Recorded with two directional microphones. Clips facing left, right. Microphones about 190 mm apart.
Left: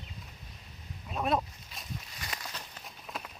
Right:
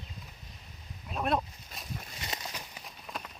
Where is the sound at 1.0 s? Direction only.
Centre (ahead or behind).